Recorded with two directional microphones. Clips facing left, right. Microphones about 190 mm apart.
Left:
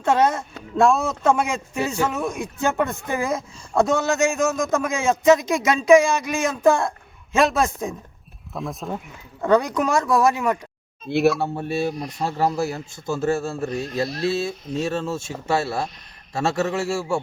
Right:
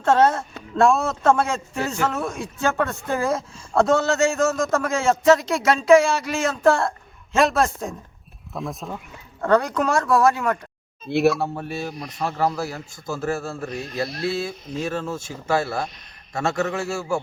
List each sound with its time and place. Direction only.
0.0 s speech: 15° left (ahead or behind)
0.8 s speech: centre (ahead or behind)
1.2 s speech: 15° left (ahead or behind)
8.5 s speech: centre (ahead or behind)
9.4 s speech: 15° left (ahead or behind)
11.0 s speech: centre (ahead or behind)
11.5 s a man's voice: 25° left (ahead or behind)